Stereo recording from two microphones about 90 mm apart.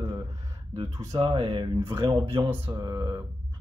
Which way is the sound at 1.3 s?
80° right.